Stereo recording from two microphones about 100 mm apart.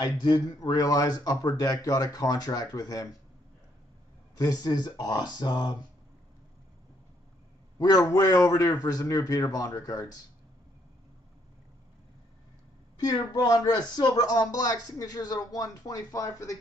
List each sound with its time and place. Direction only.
0.2 s speech: 45° left (ahead or behind)
4.4 s speech: 40° left (ahead or behind)
7.8 s speech: 40° left (ahead or behind)
12.9 s speech: 40° left (ahead or behind)